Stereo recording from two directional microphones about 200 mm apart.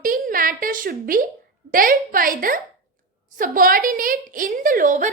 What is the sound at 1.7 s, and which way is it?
A woman's voice, 45° right (ahead or behind).